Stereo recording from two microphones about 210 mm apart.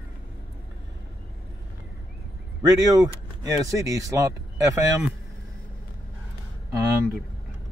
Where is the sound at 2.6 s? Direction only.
15° right (ahead or behind).